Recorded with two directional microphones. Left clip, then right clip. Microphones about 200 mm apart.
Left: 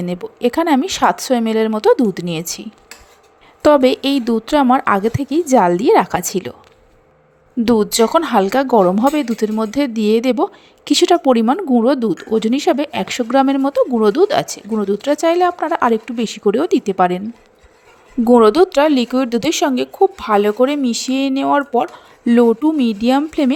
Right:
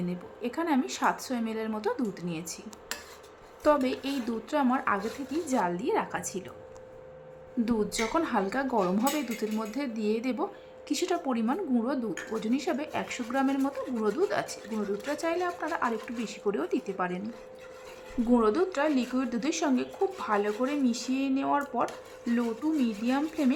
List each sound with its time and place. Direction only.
0.1 s speech: 40° left (ahead or behind)
3.6 s speech: 40° left (ahead or behind)
7.6 s speech: 40° left (ahead or behind)
18.3 s speech: 40° left (ahead or behind)